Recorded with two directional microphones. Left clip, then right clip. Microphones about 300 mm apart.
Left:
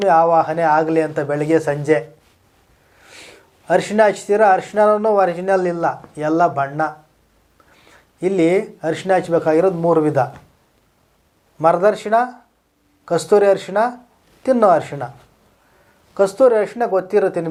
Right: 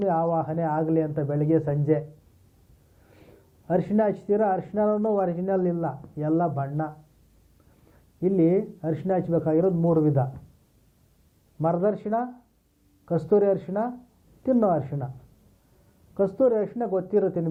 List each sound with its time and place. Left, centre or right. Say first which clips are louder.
0.0 s speech: left 11 dB; centre
11.6 s speech: left 10 dB; centre